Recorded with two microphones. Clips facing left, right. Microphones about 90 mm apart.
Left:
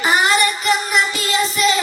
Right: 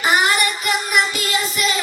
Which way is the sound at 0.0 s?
25° left (ahead or behind).